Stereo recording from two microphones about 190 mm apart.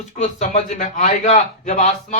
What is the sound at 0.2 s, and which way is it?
A man's voice, 40° left (ahead or behind).